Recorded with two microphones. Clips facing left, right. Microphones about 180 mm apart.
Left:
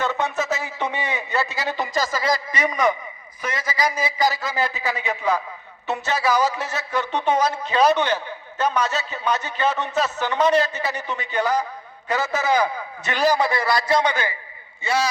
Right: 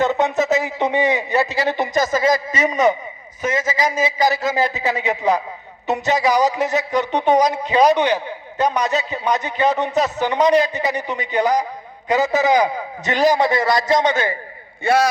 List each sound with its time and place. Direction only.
0.0 s a man's voice: 20° right (ahead or behind)
14.8 s a man's voice: 55° right (ahead or behind)